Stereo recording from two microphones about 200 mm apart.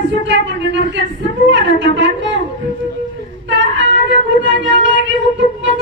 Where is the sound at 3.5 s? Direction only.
65° right (ahead or behind).